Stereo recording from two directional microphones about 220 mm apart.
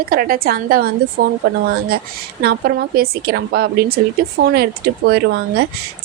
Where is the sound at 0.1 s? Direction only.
40° right (ahead or behind).